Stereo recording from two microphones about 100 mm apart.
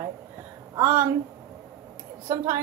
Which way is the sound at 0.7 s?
25° right (ahead or behind).